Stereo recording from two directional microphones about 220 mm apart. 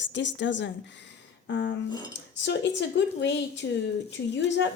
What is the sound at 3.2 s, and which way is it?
A woman's voice, 55° left (ahead or behind).